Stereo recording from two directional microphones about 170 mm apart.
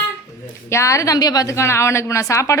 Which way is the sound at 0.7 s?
15° left (ahead or behind).